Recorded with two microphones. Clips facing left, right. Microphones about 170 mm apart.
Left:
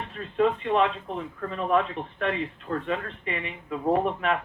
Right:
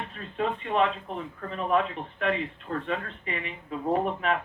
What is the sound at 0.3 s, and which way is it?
Speech, 40° left (ahead or behind).